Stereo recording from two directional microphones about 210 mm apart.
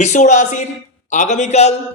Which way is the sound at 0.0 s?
35° left (ahead or behind).